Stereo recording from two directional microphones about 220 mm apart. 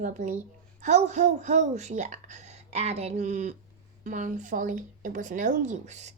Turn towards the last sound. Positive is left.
turn(degrees=-30)  # may be behind; listen again after turning